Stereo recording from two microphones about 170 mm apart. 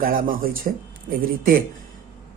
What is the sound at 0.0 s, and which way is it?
Speech, 55° right (ahead or behind).